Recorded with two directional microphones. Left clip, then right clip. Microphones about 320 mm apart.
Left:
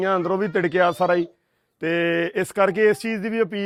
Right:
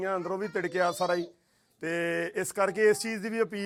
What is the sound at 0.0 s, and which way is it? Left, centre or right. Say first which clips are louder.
Speech: left 10 dB; left.